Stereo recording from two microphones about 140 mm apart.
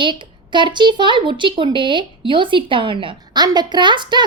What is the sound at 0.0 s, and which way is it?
A woman's voice, 35° right (ahead or behind).